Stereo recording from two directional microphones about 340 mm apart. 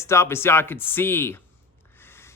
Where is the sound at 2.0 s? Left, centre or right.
Centre.